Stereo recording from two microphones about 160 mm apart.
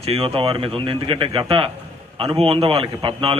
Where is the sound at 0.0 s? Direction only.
35° right (ahead or behind).